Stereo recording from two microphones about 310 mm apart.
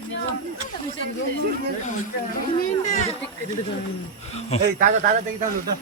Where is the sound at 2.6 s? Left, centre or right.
Left.